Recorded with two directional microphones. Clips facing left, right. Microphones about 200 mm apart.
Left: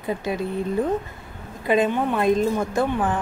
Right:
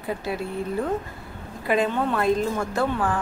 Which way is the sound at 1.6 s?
20° left (ahead or behind).